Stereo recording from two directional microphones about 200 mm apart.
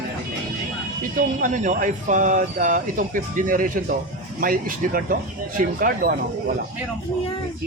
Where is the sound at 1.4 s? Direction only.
40° right (ahead or behind).